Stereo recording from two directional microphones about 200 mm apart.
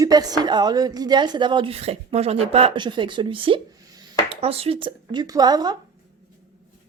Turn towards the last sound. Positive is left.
turn(degrees=-20)  # may be behind; listen again after turning